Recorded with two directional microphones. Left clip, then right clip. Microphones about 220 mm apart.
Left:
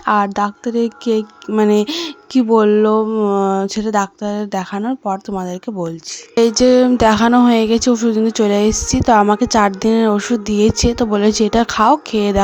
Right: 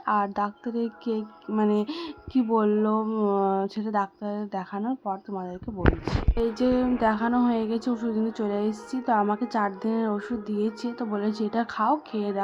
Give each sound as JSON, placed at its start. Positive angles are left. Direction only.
{"t": 0.0, "sound": "speech", "side_deg": 35}